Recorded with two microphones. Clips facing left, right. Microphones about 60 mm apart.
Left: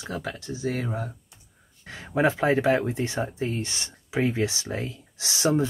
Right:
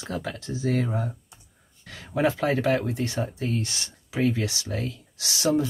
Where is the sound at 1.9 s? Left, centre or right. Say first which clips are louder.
Left 1 dB; left.